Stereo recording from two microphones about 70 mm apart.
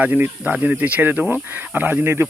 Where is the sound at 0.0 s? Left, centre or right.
Right.